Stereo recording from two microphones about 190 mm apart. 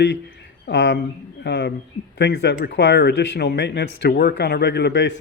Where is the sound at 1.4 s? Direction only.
60° left (ahead or behind).